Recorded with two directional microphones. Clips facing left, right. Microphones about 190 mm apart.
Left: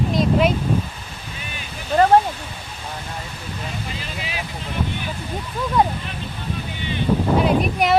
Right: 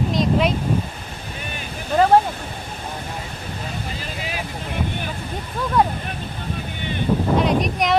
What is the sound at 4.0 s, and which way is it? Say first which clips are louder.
Vehicle: right 1 dB; 45° right (ahead or behind).